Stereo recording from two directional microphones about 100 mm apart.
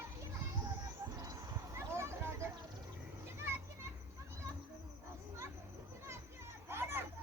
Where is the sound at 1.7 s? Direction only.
30° right (ahead or behind).